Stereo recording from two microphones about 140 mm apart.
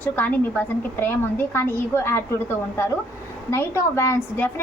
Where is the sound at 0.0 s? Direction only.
15° left (ahead or behind).